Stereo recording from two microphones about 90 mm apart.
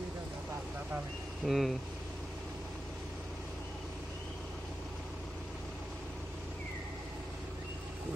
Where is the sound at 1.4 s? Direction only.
Centre (ahead or behind).